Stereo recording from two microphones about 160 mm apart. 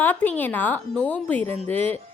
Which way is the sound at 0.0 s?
10° left (ahead or behind).